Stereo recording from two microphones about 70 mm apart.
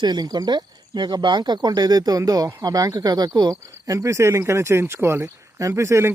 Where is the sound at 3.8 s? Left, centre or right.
Right.